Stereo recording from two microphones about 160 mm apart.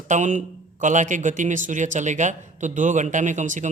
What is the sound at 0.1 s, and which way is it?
A man's voice, 50° right (ahead or behind).